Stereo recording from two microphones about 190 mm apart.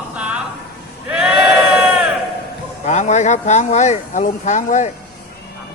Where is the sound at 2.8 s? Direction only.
40° left (ahead or behind).